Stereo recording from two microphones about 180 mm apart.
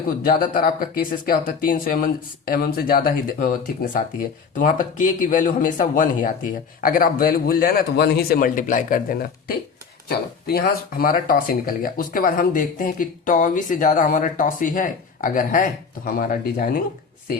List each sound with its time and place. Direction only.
0.3 s speech: 50° left (ahead or behind)